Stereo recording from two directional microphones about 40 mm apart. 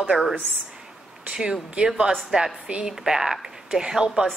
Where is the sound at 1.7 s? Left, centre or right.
Right.